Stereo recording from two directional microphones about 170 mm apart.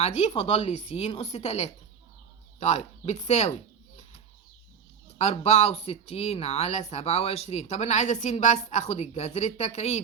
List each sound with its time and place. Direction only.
0.0 s speech: 40° left (ahead or behind)
5.1 s speech: 35° left (ahead or behind)